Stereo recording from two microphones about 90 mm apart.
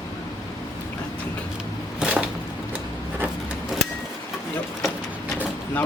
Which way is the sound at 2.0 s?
10° right (ahead or behind).